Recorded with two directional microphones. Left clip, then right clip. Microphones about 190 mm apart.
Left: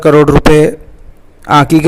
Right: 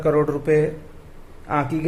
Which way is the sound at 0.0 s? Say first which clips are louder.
Left 13 dB; 45° left (ahead or behind).